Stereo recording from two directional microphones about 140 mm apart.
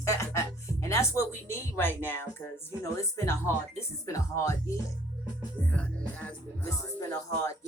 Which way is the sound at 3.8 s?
20° left (ahead or behind).